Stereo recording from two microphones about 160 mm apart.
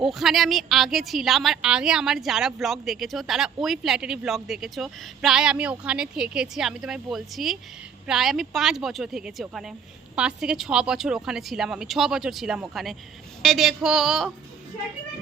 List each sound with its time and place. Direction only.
0.0 s a woman's voice: centre (ahead or behind)